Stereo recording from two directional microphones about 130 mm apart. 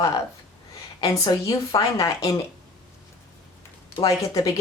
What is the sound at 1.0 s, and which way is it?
Speech, 25° left (ahead or behind).